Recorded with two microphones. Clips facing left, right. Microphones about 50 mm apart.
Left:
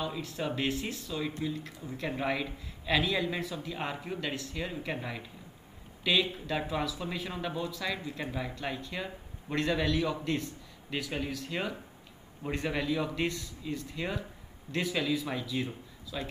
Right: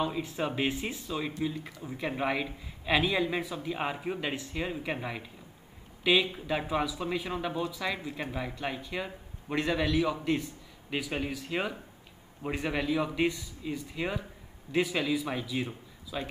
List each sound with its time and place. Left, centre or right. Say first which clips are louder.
0.0 s a man's voice: right 3 dB; centre